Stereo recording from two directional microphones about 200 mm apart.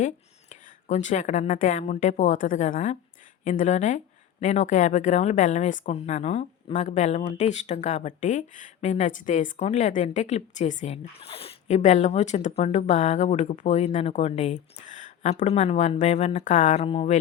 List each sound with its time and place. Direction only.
0.5 s speech: 35° left (ahead or behind)